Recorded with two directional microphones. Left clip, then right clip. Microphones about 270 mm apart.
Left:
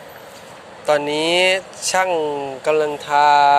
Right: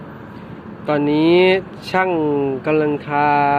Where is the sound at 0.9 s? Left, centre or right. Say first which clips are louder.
Right 2 dB; left.